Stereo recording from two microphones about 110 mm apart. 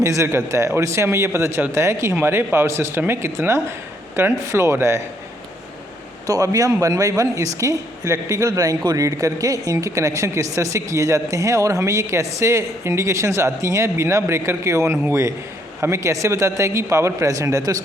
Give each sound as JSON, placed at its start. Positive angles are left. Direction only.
{"t": 0.0, "sound": "speech", "side_deg": -25}
{"t": 6.2, "sound": "speech", "side_deg": -30}